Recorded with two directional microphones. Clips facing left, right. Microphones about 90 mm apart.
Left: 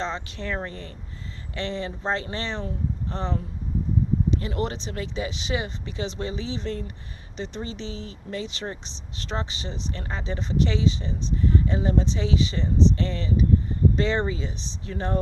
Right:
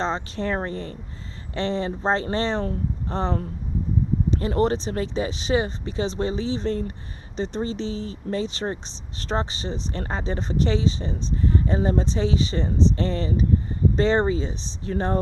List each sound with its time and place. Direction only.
0.0 s speech: 35° right (ahead or behind)